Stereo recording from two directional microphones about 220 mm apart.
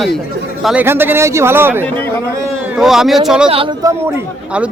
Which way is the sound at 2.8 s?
Centre (ahead or behind).